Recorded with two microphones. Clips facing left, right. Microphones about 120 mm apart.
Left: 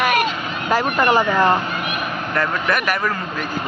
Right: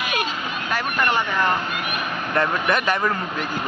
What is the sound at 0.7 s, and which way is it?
Speech, 35° left (ahead or behind).